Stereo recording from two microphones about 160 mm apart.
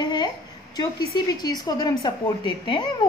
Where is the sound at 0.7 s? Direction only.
25° left (ahead or behind).